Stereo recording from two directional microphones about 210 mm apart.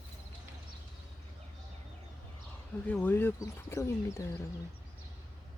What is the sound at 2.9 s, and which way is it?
Speech, 10° left (ahead or behind).